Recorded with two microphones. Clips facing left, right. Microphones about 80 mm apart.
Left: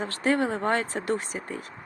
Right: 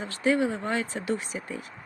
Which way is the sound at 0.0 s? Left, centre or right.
Left.